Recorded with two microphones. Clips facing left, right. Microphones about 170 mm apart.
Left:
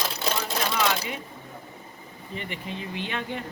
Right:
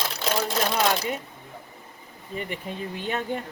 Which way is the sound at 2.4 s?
45° right (ahead or behind).